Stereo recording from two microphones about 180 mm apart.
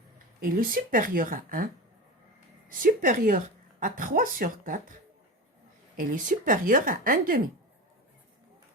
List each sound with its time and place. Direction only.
0.3 s a woman's voice: 55° right (ahead or behind)
6.0 s a woman's voice: 50° right (ahead or behind)